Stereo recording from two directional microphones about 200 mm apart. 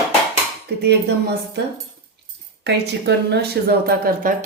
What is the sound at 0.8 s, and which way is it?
Speech, 55° right (ahead or behind).